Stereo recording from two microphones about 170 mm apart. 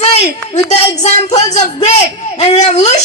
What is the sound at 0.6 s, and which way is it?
Speech, 40° left (ahead or behind).